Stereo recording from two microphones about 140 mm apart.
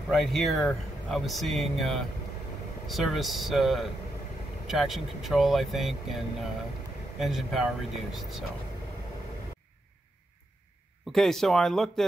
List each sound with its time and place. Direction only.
0.1 s speech: centre (ahead or behind)
11.1 s speech: centre (ahead or behind)